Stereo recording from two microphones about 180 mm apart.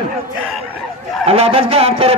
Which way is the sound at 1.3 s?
35° right (ahead or behind).